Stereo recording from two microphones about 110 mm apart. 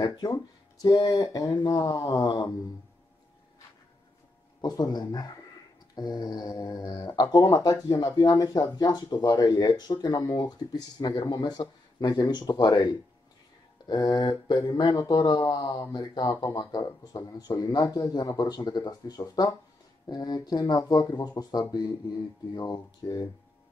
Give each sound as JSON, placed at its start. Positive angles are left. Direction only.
{"t": 0.0, "sound": "speech", "side_deg": 40}
{"t": 4.6, "sound": "speech", "side_deg": 35}